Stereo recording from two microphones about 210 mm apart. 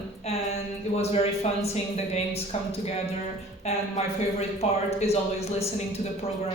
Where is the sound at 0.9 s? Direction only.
30° left (ahead or behind).